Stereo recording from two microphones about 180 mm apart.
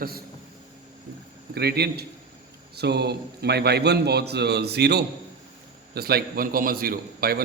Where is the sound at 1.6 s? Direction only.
65° right (ahead or behind).